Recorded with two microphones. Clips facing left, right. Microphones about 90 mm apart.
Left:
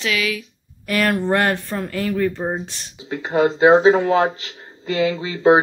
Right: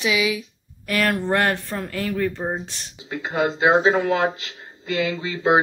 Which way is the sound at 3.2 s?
35° left (ahead or behind).